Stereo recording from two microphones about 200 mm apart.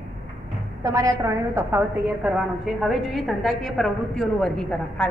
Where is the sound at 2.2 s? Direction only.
5° right (ahead or behind).